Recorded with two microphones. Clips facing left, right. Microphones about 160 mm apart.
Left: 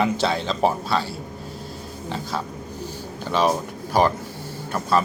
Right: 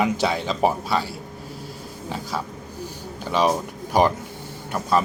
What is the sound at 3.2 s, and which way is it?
A man's voice, 10° right (ahead or behind).